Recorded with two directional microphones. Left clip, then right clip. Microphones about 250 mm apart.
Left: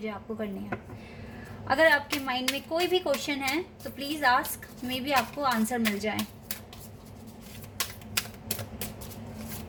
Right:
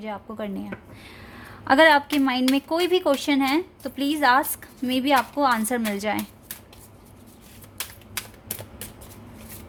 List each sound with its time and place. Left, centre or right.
0.0 s speech: right
1.6 s a woman's voice: right